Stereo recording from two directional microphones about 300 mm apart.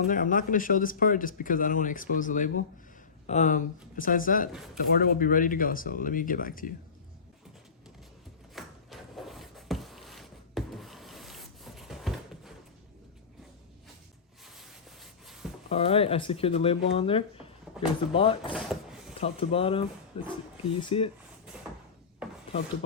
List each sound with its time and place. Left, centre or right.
0.1 s speech: left
8.5 s a sound: centre
14.4 s rub: centre
15.7 s speech: centre
18.5 s drawer open or close: centre
19.1 s speech: centre
22.2 s wood: centre